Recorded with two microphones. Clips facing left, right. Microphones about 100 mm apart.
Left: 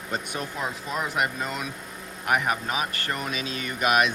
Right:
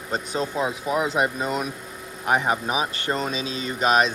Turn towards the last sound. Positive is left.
turn(degrees=-30)  # may be behind; listen again after turning